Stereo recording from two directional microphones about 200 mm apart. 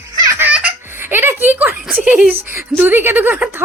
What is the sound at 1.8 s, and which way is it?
Speech, 5° right (ahead or behind).